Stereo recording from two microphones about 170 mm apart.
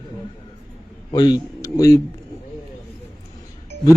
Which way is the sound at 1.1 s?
25° left (ahead or behind).